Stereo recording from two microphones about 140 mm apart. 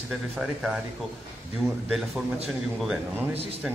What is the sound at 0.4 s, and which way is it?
Speech, 5° right (ahead or behind).